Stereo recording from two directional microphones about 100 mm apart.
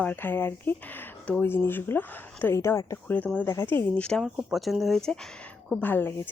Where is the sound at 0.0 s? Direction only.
20° left (ahead or behind).